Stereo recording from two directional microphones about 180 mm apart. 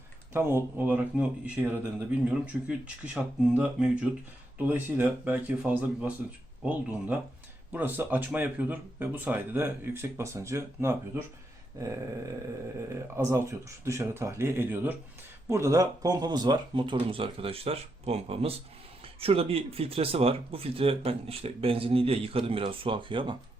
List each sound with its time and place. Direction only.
0.3 s speech: 15° right (ahead or behind)
13.1 s speech: 15° right (ahead or behind)